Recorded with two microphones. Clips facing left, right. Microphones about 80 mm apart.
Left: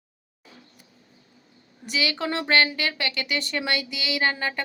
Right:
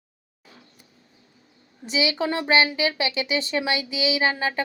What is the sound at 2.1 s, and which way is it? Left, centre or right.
Speech, centre.